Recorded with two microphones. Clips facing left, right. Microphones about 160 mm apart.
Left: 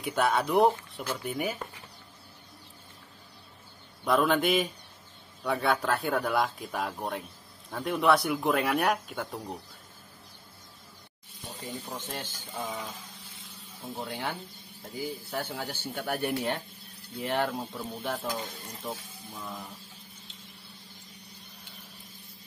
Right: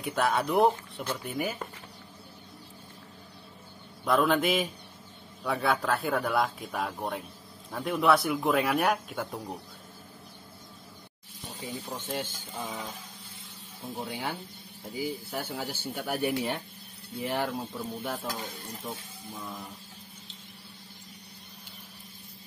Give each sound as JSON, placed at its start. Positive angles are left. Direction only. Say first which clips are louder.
{"t": 0.0, "sound": "speech", "louder": "left 1 dB", "side_deg": 0}
{"t": 4.0, "sound": "speech", "louder": "even", "side_deg": 0}
{"t": 11.6, "sound": "speech", "louder": "right 1 dB", "side_deg": -5}
{"t": 13.8, "sound": "speech", "louder": "even", "side_deg": 0}